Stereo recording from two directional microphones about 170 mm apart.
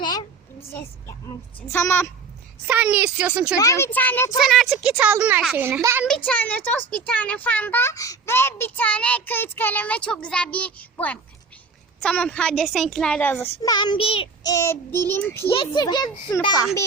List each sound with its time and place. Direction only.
0.0 s a sound: 25° left (ahead or behind)
0.7 s speech: 15° left (ahead or behind)
2.6 s a woman's voice: 10° right (ahead or behind)
3.6 s speech: 15° left (ahead or behind)
4.4 s a woman's voice: centre (ahead or behind)
5.6 s a woman's voice: 15° right (ahead or behind)
6.1 s speech: 10° left (ahead or behind); by 14.3 s 30° left (ahead or behind)
14.4 s speech: 15° left (ahead or behind)
15.4 s speech: 30° left (ahead or behind)